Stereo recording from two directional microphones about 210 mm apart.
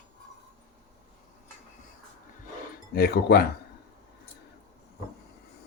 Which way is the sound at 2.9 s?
50° left (ahead or behind).